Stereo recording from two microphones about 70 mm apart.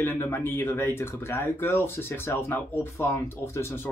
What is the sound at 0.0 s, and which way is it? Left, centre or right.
Speech, left.